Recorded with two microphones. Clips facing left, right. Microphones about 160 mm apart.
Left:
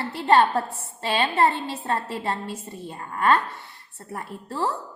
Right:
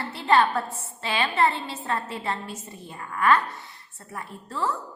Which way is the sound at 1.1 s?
35° left (ahead or behind).